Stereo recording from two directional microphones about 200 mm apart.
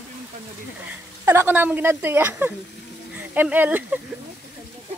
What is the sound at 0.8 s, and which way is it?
Speech, 10° right (ahead or behind).